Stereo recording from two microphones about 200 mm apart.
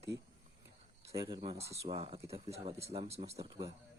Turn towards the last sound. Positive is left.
turn(degrees=-30)  # may be behind; listen again after turning